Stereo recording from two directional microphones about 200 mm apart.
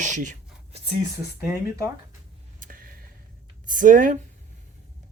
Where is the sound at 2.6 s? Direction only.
45° right (ahead or behind).